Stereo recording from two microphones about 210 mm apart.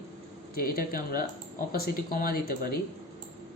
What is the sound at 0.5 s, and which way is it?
A man's voice, 45° left (ahead or behind).